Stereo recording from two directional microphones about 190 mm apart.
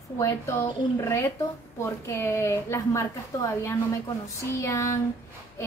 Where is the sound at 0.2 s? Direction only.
15° left (ahead or behind).